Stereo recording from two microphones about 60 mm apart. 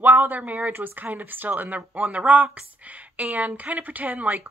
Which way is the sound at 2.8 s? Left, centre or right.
Right.